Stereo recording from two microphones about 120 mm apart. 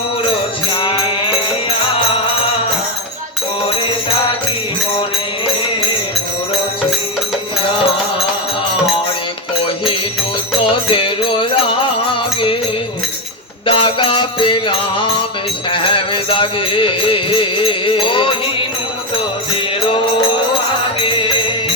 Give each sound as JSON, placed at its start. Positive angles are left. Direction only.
{"t": 10.7, "sound": "music", "side_deg": 45}
{"t": 13.7, "sound": "music", "side_deg": 45}
{"t": 21.0, "sound": "music", "side_deg": 45}